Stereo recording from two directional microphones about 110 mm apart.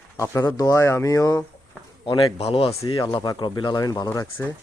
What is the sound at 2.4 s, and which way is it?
Speech, 65° left (ahead or behind).